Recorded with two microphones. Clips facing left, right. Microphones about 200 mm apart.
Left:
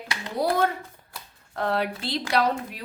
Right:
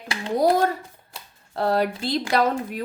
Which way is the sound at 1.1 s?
35° right (ahead or behind).